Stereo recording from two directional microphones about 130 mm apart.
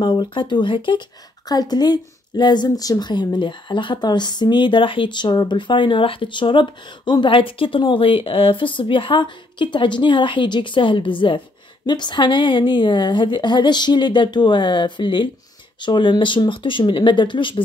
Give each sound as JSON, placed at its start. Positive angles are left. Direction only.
{"t": 0.0, "sound": "speech", "side_deg": 40}